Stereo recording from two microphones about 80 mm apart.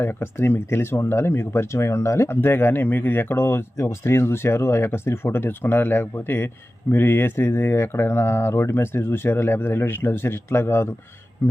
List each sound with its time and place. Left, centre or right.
0.0 s speech: left